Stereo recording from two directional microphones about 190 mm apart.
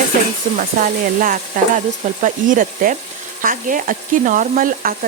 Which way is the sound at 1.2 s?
45° right (ahead or behind).